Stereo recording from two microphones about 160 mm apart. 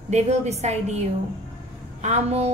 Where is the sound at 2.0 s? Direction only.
40° right (ahead or behind).